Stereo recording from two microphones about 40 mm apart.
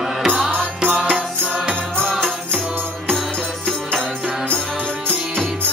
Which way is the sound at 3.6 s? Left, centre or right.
Centre.